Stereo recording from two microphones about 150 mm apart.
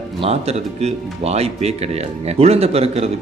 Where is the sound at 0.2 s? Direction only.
45° right (ahead or behind).